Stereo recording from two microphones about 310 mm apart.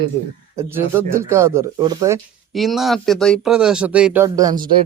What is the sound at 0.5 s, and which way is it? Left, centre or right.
Speech, centre.